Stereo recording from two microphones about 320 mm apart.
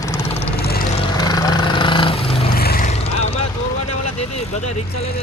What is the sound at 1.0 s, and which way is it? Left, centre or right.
Vehicle, centre.